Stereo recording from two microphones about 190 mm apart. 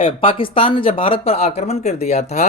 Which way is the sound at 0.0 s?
25° left (ahead or behind).